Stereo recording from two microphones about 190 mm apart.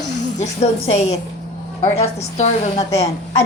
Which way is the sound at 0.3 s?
35° left (ahead or behind).